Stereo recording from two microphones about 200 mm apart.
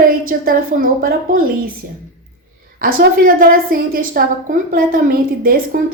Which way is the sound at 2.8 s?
45° right (ahead or behind).